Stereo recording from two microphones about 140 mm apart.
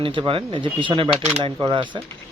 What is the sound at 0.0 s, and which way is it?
Speech, 40° right (ahead or behind).